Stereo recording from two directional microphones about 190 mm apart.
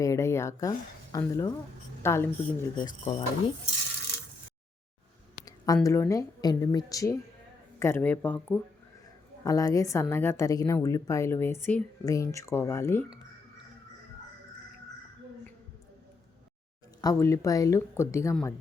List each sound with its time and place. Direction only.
0.0 s a woman's voice: 15° left (ahead or behind)
2.7 s speech: 25° left (ahead or behind)
5.5 s a woman's voice: 20° left (ahead or behind)
17.0 s a woman's voice: 15° left (ahead or behind)